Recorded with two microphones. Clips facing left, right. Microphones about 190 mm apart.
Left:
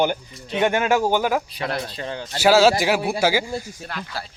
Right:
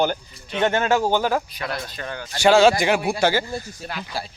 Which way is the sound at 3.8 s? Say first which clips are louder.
Right 1 dB; 10° right (ahead or behind).